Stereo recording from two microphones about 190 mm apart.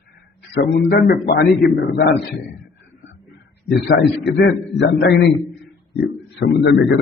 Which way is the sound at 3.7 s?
55° left (ahead or behind).